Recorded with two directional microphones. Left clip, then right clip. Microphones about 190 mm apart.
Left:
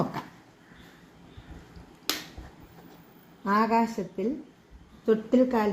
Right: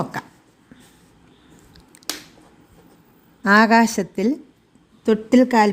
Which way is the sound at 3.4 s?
50° right (ahead or behind).